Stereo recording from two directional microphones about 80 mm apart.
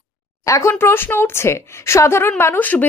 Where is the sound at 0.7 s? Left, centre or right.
Left.